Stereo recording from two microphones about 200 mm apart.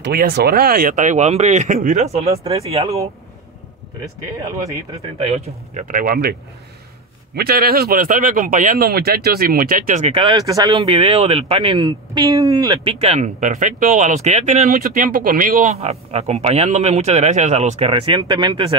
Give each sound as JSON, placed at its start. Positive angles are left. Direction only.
{"t": 0.0, "sound": "speech", "side_deg": -55}
{"t": 4.9, "sound": "speech", "side_deg": -35}
{"t": 7.3, "sound": "speech", "side_deg": -50}
{"t": 10.2, "sound": "speech", "side_deg": -20}
{"t": 13.0, "sound": "speech", "side_deg": -35}